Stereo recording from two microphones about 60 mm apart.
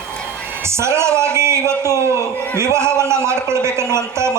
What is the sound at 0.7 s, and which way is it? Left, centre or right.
A man's voice, right.